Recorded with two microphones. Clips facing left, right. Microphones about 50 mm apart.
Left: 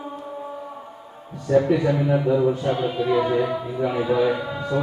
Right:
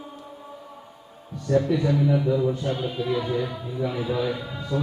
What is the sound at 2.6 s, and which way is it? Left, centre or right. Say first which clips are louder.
Speech: left 5 dB; centre.